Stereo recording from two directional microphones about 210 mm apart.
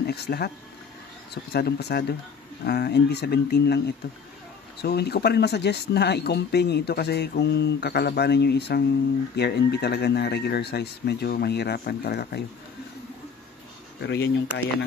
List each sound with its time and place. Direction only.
0.0 s speech: 50° left (ahead or behind)
13.9 s speech: 55° left (ahead or behind)